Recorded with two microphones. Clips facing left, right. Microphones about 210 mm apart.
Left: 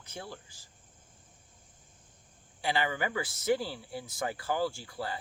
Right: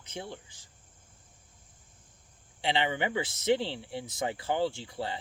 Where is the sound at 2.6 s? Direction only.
25° right (ahead or behind).